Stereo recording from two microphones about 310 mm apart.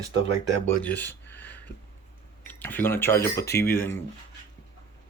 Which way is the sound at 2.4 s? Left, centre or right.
Centre.